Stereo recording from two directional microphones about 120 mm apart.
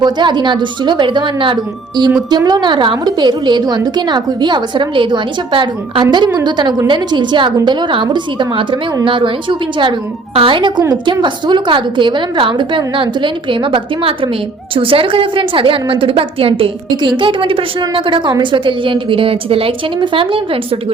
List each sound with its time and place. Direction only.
0.0 s a woman's voice: 40° right (ahead or behind)